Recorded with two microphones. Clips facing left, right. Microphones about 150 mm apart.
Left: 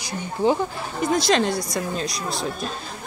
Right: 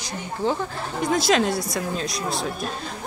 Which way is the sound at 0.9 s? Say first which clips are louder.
Even; centre (ahead or behind).